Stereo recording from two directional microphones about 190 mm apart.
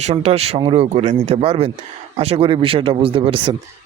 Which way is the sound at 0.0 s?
35° right (ahead or behind).